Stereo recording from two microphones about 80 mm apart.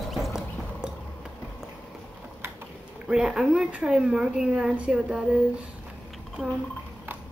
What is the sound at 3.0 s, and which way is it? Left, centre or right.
Speech, centre.